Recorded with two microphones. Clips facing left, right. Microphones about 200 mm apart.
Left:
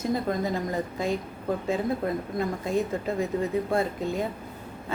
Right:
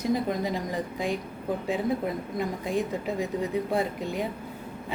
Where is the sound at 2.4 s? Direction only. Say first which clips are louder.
Left 1 dB; 15° right (ahead or behind).